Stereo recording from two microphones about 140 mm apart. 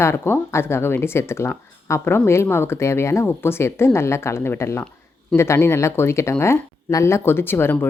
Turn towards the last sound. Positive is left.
turn(degrees=15)  # may be behind; listen again after turning